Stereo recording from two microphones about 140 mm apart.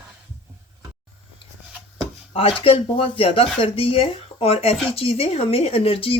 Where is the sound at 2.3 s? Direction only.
40° left (ahead or behind).